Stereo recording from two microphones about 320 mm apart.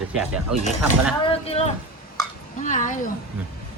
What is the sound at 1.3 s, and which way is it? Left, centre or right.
Speech, centre.